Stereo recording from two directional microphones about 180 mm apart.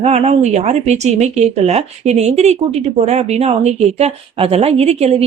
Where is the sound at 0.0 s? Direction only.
35° right (ahead or behind).